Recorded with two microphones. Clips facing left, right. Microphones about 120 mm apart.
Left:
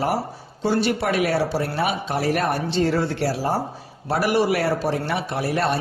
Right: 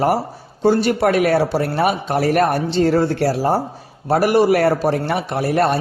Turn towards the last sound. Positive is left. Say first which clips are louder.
# right 5 dB
turn(degrees=-50)  # may be behind; listen again after turning